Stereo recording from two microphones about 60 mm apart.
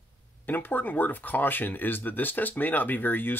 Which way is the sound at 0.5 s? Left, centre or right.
Left.